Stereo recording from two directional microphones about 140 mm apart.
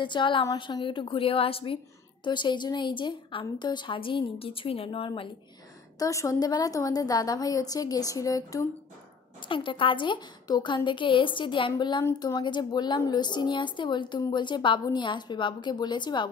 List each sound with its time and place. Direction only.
0.0 s a woman's voice: 35° left (ahead or behind)
5.9 s a woman's voice: 25° left (ahead or behind)
9.5 s a woman's voice: 35° left (ahead or behind)